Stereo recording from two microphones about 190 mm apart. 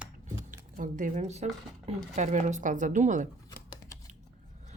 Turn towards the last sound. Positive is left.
turn(degrees=-40)  # may be behind; listen again after turning